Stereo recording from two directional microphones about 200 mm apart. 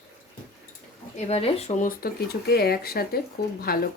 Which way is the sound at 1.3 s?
30° left (ahead or behind).